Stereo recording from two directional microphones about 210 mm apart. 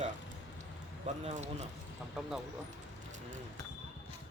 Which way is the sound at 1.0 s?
30° right (ahead or behind).